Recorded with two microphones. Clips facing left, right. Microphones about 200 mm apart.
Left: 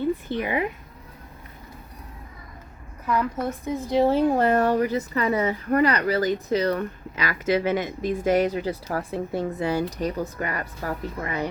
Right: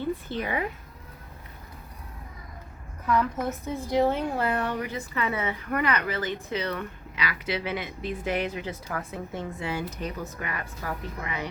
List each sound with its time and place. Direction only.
0.3 s speech: 15° left (ahead or behind)
3.7 s a woman's voice: 20° left (ahead or behind); by 11.4 s 45° left (ahead or behind)